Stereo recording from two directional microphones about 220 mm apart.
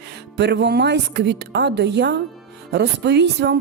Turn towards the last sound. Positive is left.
turn(degrees=-50)  # may be behind; listen again after turning